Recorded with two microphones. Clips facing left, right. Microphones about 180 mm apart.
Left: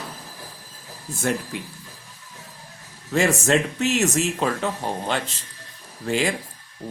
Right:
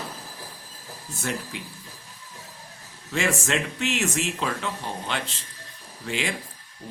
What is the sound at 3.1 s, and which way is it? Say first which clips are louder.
Speech: left 6 dB; 40° left (ahead or behind).